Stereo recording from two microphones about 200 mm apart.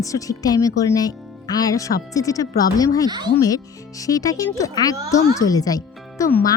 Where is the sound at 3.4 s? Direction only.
15° left (ahead or behind).